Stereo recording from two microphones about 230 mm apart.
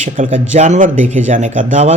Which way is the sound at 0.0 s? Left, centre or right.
Right.